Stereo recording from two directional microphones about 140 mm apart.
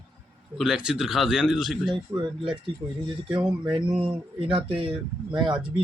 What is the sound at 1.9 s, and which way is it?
Speech, 35° right (ahead or behind).